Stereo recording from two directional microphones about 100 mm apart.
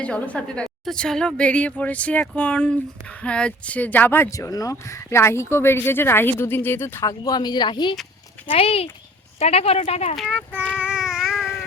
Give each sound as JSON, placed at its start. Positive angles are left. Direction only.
{"t": 0.0, "sound": "speech", "side_deg": 10}
{"t": 4.3, "sound": "speech", "side_deg": 35}
{"t": 7.0, "sound": "speech", "side_deg": 35}
{"t": 8.4, "sound": "speech", "side_deg": 75}
{"t": 9.4, "sound": "speech", "side_deg": 90}
{"t": 10.8, "sound": "child singing", "side_deg": -10}